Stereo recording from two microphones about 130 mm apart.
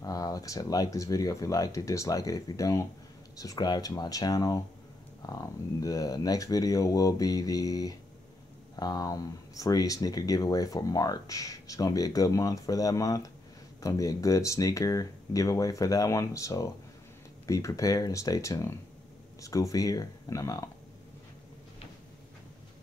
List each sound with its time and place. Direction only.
0.0 s speech: 30° left (ahead or behind)